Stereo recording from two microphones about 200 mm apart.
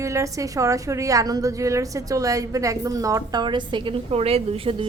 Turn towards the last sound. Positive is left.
turn(degrees=-30)  # may be behind; listen again after turning